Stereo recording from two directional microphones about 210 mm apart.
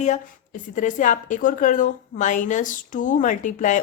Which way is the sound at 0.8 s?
35° left (ahead or behind).